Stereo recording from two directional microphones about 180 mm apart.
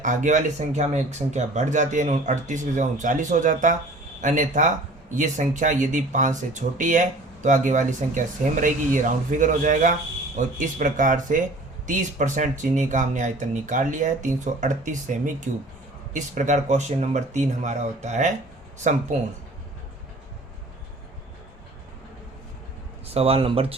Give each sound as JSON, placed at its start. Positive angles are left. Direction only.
{"t": 0.0, "sound": "speech", "side_deg": -45}
{"t": 23.0, "sound": "speech", "side_deg": -35}